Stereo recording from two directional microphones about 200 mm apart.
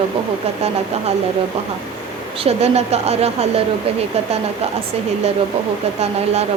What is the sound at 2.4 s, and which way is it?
Speech, 30° right (ahead or behind).